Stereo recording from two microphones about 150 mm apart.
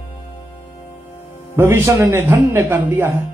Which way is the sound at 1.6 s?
20° right (ahead or behind).